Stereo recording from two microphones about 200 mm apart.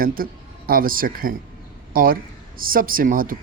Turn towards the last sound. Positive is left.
turn(degrees=-45)  # may be behind; listen again after turning